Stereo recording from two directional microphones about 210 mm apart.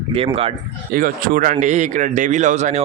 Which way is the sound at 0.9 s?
40° right (ahead or behind).